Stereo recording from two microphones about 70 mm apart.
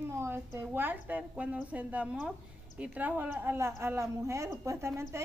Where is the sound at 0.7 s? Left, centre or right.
Right.